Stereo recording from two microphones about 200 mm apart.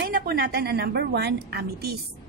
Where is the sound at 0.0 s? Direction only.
50° right (ahead or behind).